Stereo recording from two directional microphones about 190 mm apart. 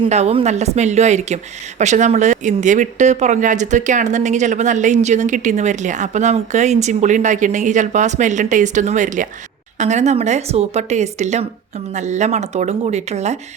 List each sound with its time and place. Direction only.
0.0 s speech: 35° right (ahead or behind)